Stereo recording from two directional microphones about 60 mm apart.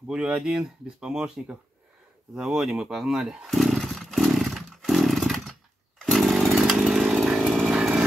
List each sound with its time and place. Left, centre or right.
0.1 s speech: centre
3.4 s roar: centre
7.7 s a sound: centre